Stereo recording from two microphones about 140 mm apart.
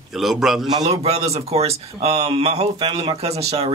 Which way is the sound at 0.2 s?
Centre (ahead or behind).